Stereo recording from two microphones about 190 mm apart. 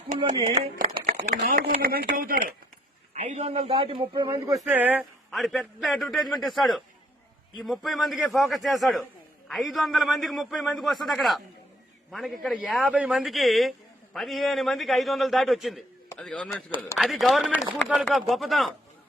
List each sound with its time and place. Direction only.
0.5 s speech: 35° right (ahead or behind)
1.4 s speech: 55° right (ahead or behind)
3.2 s a man's voice: 35° right (ahead or behind); by 18.7 s centre (ahead or behind)